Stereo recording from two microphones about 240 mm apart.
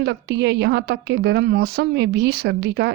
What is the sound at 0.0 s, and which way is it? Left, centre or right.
A woman's voice, right.